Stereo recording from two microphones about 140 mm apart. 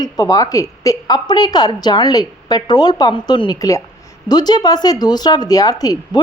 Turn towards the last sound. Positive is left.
turn(degrees=25)  # may be behind; listen again after turning